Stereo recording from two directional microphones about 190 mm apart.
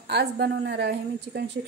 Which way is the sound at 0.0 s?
60° right (ahead or behind).